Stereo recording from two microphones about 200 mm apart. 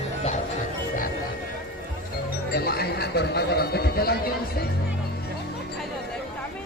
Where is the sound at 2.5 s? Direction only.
50° left (ahead or behind).